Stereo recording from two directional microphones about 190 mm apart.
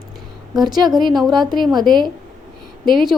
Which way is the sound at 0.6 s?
20° right (ahead or behind).